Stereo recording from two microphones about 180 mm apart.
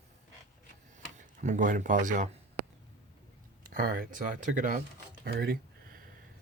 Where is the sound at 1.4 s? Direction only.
45° right (ahead or behind).